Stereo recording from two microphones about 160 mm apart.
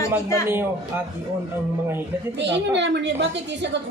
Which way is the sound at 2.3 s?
90° right.